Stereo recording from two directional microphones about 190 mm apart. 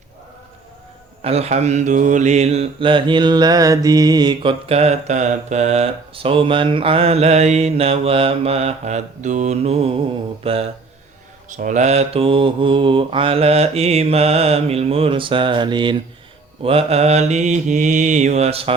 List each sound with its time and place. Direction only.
1.2 s mantra: 35° right (ahead or behind)